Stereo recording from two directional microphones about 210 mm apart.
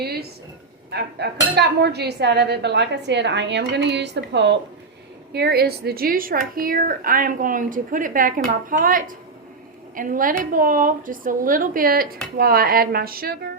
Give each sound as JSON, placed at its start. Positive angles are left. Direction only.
{"t": 0.0, "sound": "speech", "side_deg": -50}
{"t": 0.9, "sound": "dishes", "side_deg": -50}
{"t": 8.4, "sound": "speech", "side_deg": -40}
{"t": 12.4, "sound": "dishes", "side_deg": -45}